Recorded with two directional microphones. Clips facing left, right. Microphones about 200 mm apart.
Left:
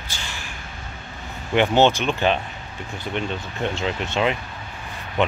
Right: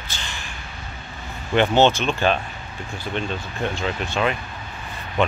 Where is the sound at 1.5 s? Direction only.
15° left (ahead or behind).